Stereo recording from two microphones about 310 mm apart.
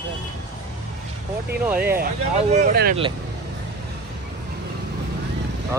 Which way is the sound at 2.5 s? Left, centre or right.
Right.